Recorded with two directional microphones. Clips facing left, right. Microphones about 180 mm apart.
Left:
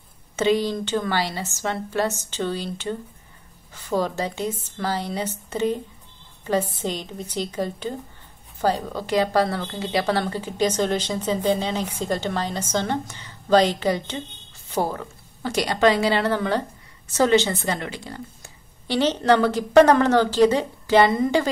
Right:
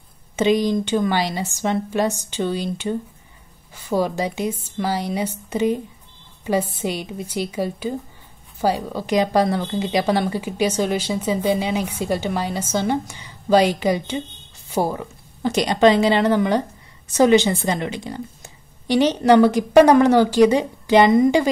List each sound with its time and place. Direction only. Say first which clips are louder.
0.4 s a woman's voice: right 3 dB; 15° right (ahead or behind)